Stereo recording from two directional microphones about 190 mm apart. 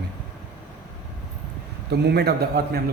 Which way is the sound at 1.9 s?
60° right (ahead or behind).